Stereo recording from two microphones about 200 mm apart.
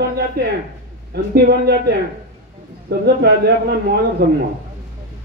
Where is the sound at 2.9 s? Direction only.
55° right (ahead or behind).